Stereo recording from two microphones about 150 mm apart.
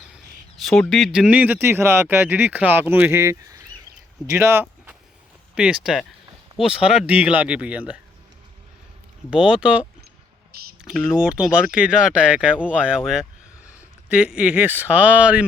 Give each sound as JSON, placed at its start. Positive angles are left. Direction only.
{"t": 0.6, "sound": "speech", "side_deg": 0}
{"t": 4.4, "sound": "a sound", "side_deg": -15}
{"t": 5.5, "sound": "speech", "side_deg": -5}
{"t": 9.3, "sound": "speech", "side_deg": -5}